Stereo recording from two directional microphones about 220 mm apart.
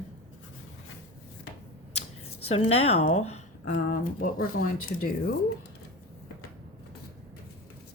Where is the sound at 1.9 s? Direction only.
30° left (ahead or behind).